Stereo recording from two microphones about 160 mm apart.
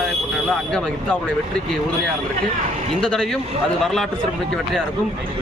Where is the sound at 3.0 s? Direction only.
5° left (ahead or behind).